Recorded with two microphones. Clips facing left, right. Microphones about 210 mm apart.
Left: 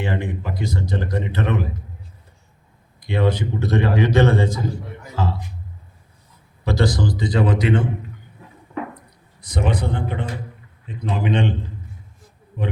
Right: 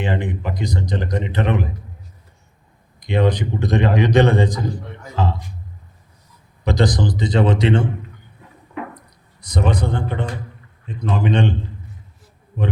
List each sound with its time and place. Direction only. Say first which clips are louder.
0.0 s speech: right 2 dB; 15° right (ahead or behind)
3.0 s a man's voice: right 2 dB; 15° right (ahead or behind)
6.7 s speech: right 2 dB; 20° right (ahead or behind)
9.0 s a sound: even; 40° right (ahead or behind)
10.8 s a man's voice: right 2 dB; 45° right (ahead or behind)